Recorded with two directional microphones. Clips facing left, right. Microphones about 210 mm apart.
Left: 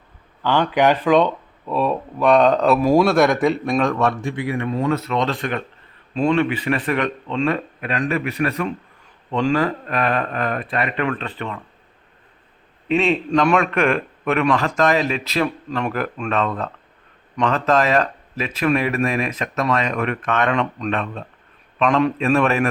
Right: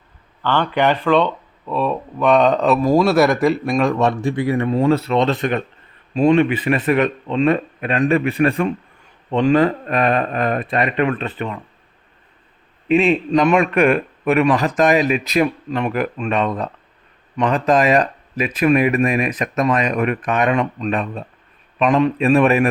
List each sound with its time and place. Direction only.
0.4 s speech: 10° left (ahead or behind)
4.2 s a man's voice: 35° right (ahead or behind); by 11.6 s 15° right (ahead or behind)
12.9 s a man's voice: 10° right (ahead or behind)